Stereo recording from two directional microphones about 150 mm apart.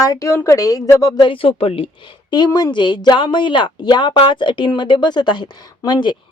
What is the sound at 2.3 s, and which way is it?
Speech, 30° left (ahead or behind).